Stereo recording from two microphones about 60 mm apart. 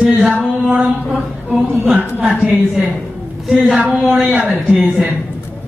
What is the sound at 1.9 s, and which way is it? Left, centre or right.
Speech, centre.